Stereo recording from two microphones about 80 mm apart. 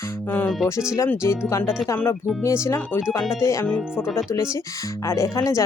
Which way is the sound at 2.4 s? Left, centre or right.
Left.